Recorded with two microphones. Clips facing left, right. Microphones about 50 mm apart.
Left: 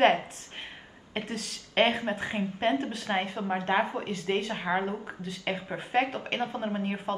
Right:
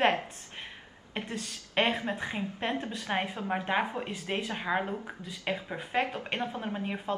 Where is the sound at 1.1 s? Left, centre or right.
Centre.